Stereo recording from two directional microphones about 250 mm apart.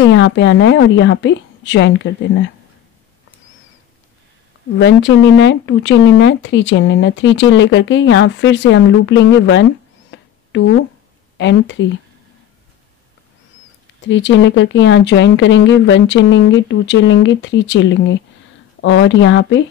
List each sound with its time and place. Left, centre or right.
0.0 s speech: left
4.7 s speech: left
10.1 s a sound: left
10.5 s speech: left
14.0 s speech: left